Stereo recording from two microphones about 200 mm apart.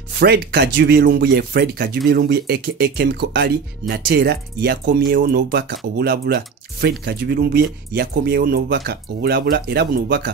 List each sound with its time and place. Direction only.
0.2 s speech: 55° right (ahead or behind)